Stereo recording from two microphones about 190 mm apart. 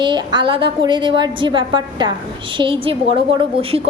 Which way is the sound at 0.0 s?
25° right (ahead or behind).